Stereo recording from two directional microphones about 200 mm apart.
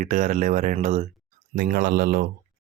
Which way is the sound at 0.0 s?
40° right (ahead or behind).